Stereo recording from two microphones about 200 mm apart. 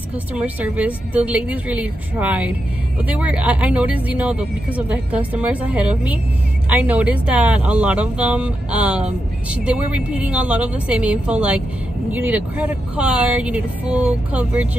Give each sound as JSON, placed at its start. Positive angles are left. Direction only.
{"t": 0.3, "sound": "a woman's voice", "side_deg": -5}